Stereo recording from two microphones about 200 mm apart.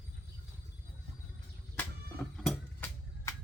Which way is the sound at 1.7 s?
5° left (ahead or behind).